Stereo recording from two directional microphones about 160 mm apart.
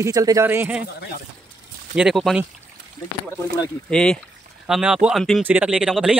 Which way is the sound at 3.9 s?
5° left (ahead or behind).